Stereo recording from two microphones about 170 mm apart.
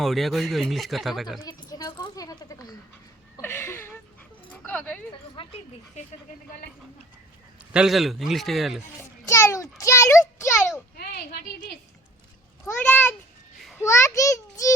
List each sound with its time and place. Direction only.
0.0 s speech: centre (ahead or behind)
1.4 s a sound: 20° left (ahead or behind)
4.5 s speech: 10° left (ahead or behind)
5.4 s speech: 35° left (ahead or behind)
7.7 s speech: 5° right (ahead or behind)
9.0 s a child's voice: 15° left (ahead or behind)
10.9 s a woman's voice: 65° left (ahead or behind)
12.6 s a child's voice: 10° left (ahead or behind)